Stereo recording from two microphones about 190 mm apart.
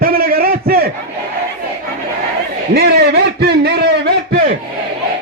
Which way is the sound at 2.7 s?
60° right (ahead or behind).